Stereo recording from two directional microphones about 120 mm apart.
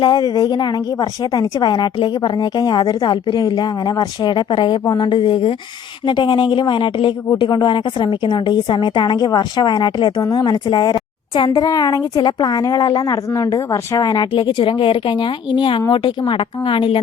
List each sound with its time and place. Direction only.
0.0 s a woman's voice: 35° left (ahead or behind)